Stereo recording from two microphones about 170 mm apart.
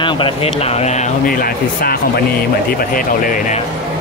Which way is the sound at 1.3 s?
60° left (ahead or behind).